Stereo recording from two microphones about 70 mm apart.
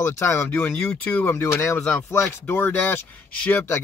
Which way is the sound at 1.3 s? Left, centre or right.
Left.